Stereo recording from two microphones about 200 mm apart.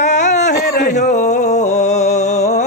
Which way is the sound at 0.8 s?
35° left (ahead or behind).